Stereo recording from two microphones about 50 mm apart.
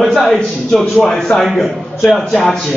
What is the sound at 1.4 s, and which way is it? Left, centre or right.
A man's voice, centre.